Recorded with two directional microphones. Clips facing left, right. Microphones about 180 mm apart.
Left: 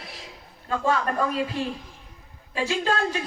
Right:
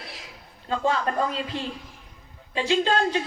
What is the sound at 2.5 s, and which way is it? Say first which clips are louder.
Speech: right 3 dB; 25° right (ahead or behind).